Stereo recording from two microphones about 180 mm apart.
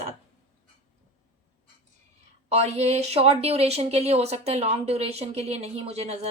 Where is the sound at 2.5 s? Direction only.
35° right (ahead or behind).